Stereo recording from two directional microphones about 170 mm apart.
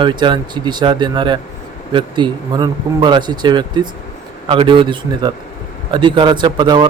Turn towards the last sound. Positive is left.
turn(degrees=-25)  # may be behind; listen again after turning